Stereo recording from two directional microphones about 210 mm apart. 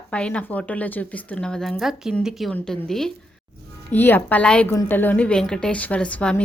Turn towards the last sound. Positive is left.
turn(degrees=5)  # may be behind; listen again after turning